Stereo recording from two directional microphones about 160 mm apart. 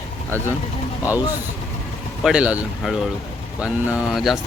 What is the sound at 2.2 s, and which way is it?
Speech, 5° right (ahead or behind).